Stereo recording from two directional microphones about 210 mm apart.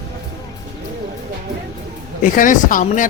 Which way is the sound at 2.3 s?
40° left (ahead or behind).